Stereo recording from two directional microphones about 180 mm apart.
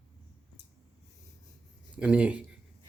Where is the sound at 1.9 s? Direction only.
5° right (ahead or behind).